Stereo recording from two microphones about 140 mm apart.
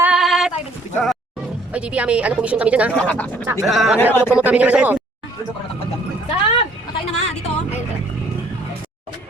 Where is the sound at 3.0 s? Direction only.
10° left (ahead or behind).